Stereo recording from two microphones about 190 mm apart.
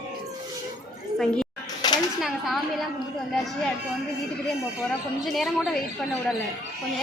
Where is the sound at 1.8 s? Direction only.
20° left (ahead or behind).